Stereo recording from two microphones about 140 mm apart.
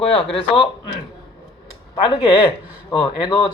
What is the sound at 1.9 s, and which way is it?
Speech, 30° left (ahead or behind).